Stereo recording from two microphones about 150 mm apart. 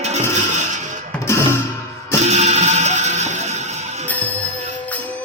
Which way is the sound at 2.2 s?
50° right (ahead or behind).